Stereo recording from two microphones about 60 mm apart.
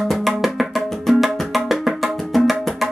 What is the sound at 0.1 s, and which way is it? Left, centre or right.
Music, centre.